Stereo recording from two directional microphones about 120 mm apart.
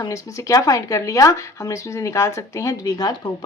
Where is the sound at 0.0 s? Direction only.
30° left (ahead or behind).